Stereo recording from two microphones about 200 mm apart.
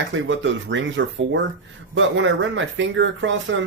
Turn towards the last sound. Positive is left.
turn(degrees=-70)  # may be behind; listen again after turning